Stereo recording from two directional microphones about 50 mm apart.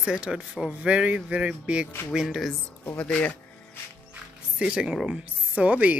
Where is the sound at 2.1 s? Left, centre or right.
Centre.